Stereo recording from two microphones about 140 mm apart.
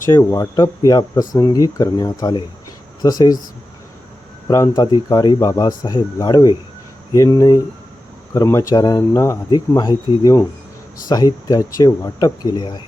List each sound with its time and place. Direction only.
0.0 s speech: 20° left (ahead or behind)
4.4 s speech: 25° left (ahead or behind)